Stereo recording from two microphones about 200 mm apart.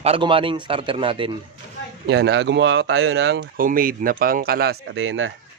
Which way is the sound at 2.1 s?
60° right (ahead or behind).